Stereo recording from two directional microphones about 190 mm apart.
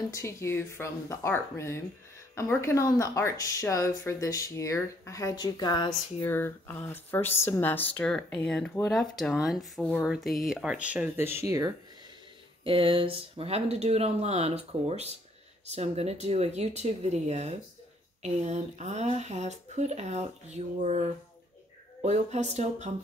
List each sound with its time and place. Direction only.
0.1 s speech: 15° left (ahead or behind)
6.2 s speech: 10° left (ahead or behind); by 11.7 s 15° right (ahead or behind)
12.6 s speech: 30° right (ahead or behind)